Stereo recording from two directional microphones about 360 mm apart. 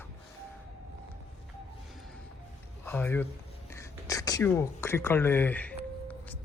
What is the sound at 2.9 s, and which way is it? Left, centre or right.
Speech, centre.